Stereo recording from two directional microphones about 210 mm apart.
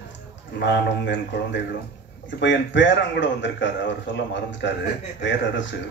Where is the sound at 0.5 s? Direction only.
55° left (ahead or behind).